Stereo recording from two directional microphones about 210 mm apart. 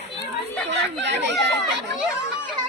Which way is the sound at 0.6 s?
55° right (ahead or behind).